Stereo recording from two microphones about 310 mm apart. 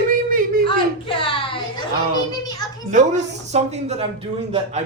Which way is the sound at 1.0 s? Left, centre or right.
Centre.